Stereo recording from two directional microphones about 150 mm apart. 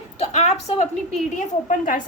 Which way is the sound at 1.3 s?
60° left (ahead or behind).